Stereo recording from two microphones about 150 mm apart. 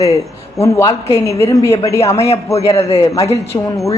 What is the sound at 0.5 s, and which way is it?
A woman's voice, 20° left (ahead or behind).